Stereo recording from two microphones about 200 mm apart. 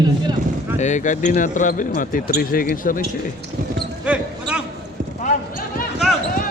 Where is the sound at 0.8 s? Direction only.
40° left (ahead or behind).